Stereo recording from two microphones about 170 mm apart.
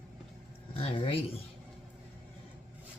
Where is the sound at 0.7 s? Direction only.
30° left (ahead or behind).